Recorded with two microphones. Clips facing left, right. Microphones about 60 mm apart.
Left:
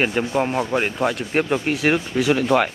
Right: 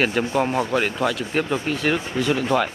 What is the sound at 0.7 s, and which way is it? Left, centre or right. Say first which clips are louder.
Speech: left 1 dB; centre.